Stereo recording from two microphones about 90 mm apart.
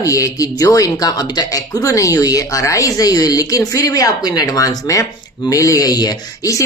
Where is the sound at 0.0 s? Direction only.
40° left (ahead or behind).